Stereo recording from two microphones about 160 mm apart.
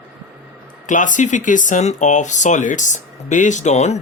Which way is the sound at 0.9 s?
50° left (ahead or behind).